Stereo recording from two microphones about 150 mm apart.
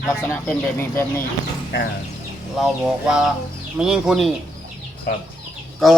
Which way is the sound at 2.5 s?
Centre (ahead or behind).